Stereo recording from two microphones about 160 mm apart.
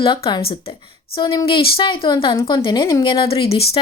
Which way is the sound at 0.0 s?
30° left (ahead or behind).